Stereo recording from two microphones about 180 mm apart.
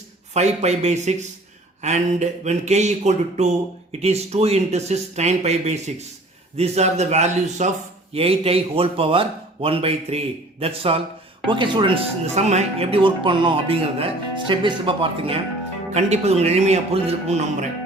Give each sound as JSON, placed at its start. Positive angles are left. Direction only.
{"t": 0.3, "sound": "a man's voice", "side_deg": -40}